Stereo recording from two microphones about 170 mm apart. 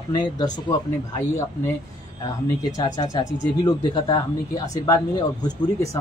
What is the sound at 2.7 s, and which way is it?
A man's voice, 20° left (ahead or behind).